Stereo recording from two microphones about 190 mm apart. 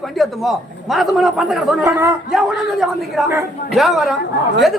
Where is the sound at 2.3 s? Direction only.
Centre (ahead or behind).